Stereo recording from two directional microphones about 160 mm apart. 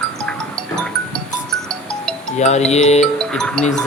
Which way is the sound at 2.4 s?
45° left (ahead or behind).